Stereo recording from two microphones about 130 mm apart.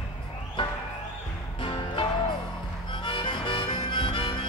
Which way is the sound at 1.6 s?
40° left (ahead or behind).